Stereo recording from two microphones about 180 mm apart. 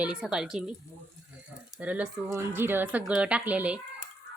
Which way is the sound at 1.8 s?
10° right (ahead or behind).